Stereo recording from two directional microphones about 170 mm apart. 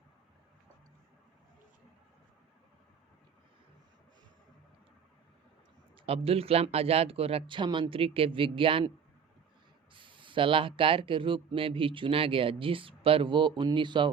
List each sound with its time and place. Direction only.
6.1 s speech: 35° right (ahead or behind)
9.9 s speech: 30° right (ahead or behind)